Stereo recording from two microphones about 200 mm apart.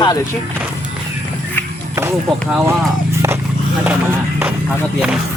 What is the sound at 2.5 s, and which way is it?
Speech, 5° right (ahead or behind).